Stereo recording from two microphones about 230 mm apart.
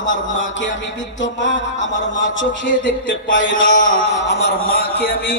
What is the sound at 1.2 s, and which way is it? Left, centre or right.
A man's voice, left.